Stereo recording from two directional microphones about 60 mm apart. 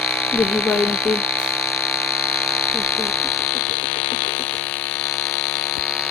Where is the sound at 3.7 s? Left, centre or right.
Left.